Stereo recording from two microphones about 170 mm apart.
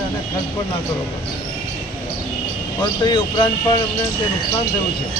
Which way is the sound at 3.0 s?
25° left (ahead or behind).